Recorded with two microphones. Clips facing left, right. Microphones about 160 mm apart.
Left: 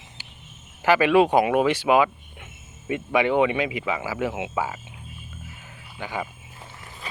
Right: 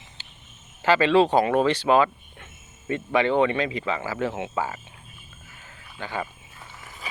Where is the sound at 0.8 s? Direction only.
15° left (ahead or behind).